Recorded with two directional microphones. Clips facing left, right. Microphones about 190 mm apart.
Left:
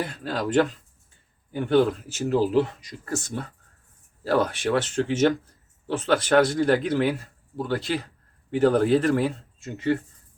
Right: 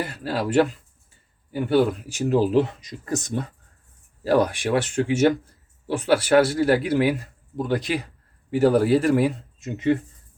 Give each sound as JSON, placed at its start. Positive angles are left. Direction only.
{"t": 0.0, "sound": "a man's voice", "side_deg": -5}